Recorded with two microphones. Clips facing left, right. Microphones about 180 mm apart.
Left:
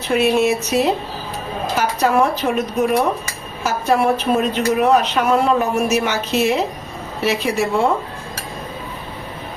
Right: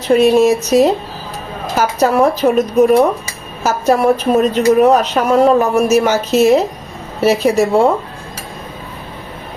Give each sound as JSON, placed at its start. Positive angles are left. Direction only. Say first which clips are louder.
{"t": 0.1, "sound": "a woman's voice", "louder": "right 6 dB", "side_deg": -35}